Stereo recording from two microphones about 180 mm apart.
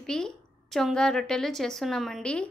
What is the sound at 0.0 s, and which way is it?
A woman's voice, 5° left (ahead or behind).